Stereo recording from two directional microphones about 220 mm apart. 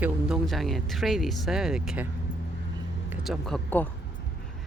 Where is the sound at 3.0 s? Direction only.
Centre (ahead or behind).